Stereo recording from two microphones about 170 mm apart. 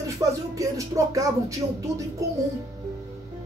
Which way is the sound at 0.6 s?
20° right (ahead or behind).